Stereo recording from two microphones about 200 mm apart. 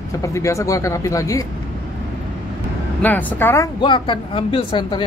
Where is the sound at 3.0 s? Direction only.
10° left (ahead or behind).